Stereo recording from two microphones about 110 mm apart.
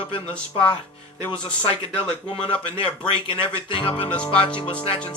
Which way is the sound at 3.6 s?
55° left (ahead or behind).